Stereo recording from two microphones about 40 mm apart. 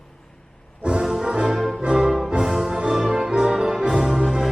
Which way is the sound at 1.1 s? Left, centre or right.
Centre.